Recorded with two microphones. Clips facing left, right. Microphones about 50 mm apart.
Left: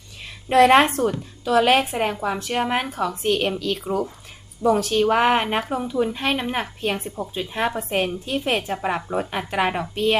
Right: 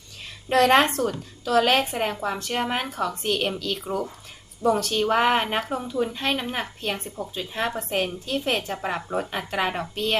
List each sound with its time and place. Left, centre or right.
0.4 s a woman's voice: centre